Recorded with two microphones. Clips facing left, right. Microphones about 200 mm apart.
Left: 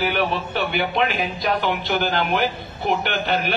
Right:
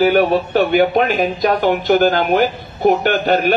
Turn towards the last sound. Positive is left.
turn(degrees=-45)  # may be behind; listen again after turning